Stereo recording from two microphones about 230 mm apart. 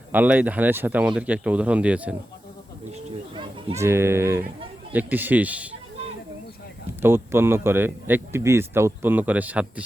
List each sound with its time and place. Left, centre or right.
0.1 s speech: centre
3.3 s children playing: right
3.8 s speech: centre
7.0 s speech: centre